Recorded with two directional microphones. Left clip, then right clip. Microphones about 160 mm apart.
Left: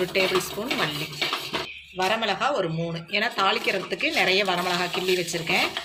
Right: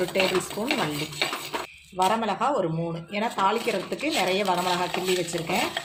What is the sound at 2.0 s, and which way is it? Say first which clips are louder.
A woman's voice: even; 35° right (ahead or behind).